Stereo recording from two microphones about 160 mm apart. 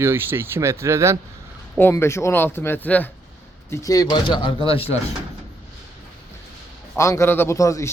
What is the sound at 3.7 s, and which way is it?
Speech, 20° left (ahead or behind).